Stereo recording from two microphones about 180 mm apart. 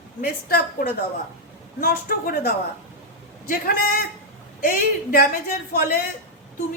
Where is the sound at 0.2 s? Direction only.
55° left (ahead or behind).